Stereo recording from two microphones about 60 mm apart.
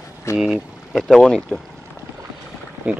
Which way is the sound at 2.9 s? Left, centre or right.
Right.